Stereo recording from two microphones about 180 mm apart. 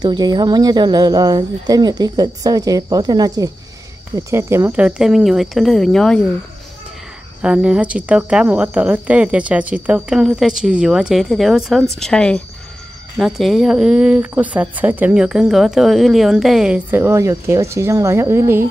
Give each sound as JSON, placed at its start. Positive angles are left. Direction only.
{"t": 0.0, "sound": "speech", "side_deg": -25}
{"t": 7.4, "sound": "speech", "side_deg": -5}